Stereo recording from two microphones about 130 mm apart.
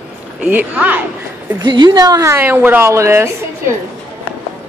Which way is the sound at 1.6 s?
35° right (ahead or behind).